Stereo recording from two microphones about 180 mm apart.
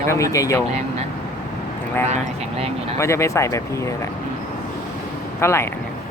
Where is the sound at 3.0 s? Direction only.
15° left (ahead or behind).